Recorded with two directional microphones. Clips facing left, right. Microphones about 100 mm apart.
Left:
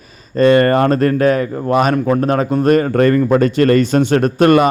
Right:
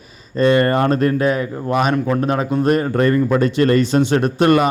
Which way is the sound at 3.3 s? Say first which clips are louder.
Left 3 dB; 50° left (ahead or behind).